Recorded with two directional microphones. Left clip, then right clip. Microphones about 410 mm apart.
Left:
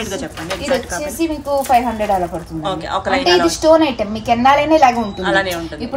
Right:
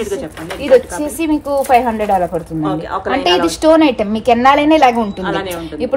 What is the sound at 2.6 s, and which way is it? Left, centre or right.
Speech, centre.